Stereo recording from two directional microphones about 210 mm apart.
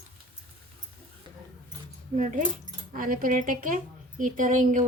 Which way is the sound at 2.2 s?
35° right (ahead or behind).